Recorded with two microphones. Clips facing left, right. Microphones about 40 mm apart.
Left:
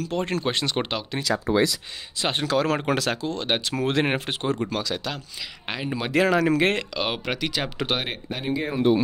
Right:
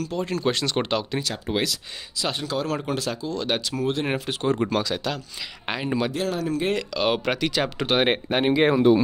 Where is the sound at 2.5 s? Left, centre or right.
Left.